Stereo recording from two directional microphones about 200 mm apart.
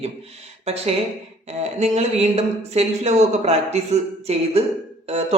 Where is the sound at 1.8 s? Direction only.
35° right (ahead or behind).